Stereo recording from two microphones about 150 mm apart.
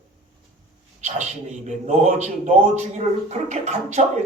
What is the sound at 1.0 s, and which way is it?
Speech, 50° right (ahead or behind).